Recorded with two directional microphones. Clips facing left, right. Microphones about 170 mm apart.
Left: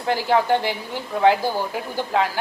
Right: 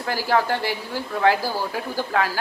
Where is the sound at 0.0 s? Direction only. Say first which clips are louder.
Left 2 dB; 20° left (ahead or behind).